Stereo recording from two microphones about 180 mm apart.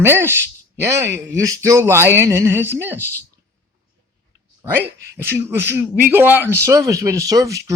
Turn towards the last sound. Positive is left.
turn(degrees=-20)  # may be behind; listen again after turning